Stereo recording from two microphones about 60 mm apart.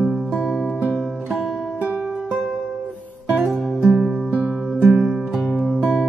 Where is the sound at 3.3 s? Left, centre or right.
Centre.